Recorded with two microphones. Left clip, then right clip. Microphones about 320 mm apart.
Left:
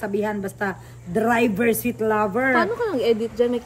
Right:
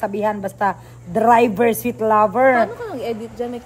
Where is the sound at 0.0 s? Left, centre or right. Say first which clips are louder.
Right 4 dB; centre.